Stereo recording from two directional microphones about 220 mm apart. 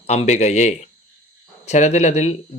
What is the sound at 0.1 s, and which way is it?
Speech, 30° left (ahead or behind).